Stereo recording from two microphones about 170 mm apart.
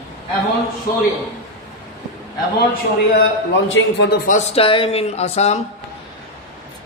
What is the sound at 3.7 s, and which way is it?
Speech, 90° left.